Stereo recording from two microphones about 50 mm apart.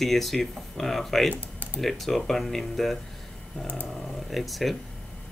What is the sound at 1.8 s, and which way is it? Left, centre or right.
Speech, centre.